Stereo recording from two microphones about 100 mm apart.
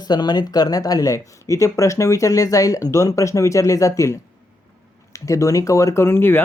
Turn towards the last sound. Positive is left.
turn(degrees=20)  # may be behind; listen again after turning